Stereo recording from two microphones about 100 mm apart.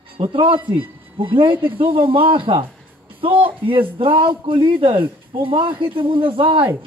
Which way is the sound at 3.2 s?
60° right (ahead or behind).